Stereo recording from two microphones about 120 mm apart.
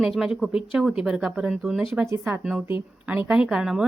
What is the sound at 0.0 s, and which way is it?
Speech, 5° right (ahead or behind).